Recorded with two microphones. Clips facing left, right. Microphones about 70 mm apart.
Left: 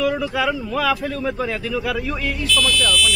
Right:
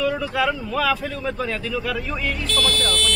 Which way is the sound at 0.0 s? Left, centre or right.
Centre.